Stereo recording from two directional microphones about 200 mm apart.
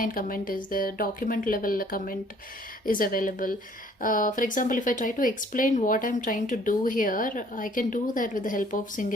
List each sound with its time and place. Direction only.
0.0 s speech: 45° left (ahead or behind)